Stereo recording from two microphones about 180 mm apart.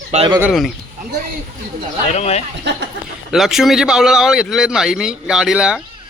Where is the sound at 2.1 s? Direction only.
35° left (ahead or behind).